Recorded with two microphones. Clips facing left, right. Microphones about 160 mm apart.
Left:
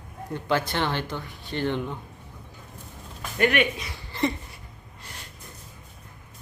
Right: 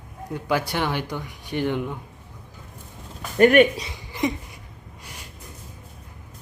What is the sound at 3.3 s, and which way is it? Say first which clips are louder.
Speech: right 8 dB; 45° right (ahead or behind).